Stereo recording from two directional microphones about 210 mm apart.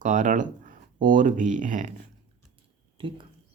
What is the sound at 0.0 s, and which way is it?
Speech, 40° right (ahead or behind).